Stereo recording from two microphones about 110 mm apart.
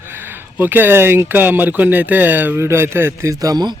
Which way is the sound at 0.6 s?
15° right (ahead or behind).